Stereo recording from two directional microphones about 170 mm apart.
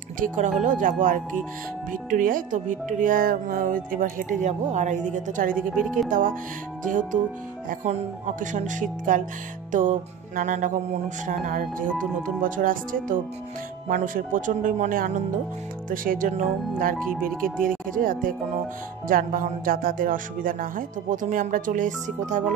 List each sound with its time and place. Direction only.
0.6 s speech: 50° right (ahead or behind)